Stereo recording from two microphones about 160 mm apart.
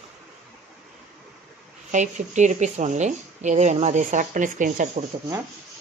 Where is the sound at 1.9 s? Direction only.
50° right (ahead or behind).